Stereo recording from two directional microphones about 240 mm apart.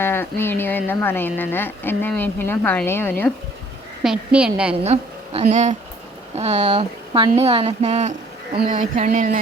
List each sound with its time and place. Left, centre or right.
0.0 s speech: centre
4.0 s a woman's voice: centre
4.8 s a woman's voice: right
8.5 s a sound: right